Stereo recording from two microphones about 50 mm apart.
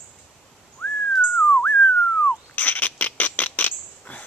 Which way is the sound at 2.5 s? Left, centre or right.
Left.